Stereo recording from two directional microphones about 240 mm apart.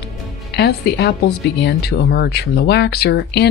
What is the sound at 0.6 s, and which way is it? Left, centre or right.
Speech, left.